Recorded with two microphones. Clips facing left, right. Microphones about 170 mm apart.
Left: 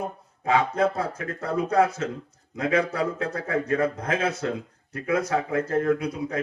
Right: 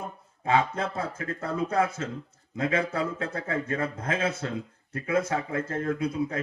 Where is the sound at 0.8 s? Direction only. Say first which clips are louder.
Left 7 dB; 25° right (ahead or behind).